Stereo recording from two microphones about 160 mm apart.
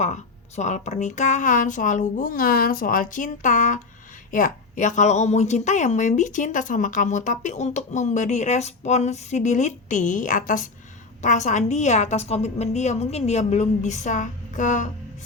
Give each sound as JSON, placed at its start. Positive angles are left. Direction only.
{"t": 0.0, "sound": "a woman's voice", "side_deg": 45}